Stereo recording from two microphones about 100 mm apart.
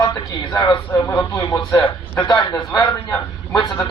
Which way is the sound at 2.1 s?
45° left (ahead or behind).